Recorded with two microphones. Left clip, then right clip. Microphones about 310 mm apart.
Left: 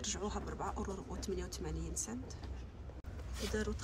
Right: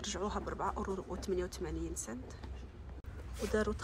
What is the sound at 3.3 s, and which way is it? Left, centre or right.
Speech, centre.